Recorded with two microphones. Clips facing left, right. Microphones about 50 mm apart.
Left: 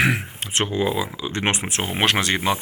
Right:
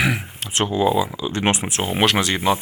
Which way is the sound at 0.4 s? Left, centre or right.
Left.